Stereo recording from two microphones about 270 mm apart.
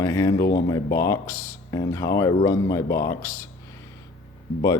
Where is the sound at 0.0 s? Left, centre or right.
Centre.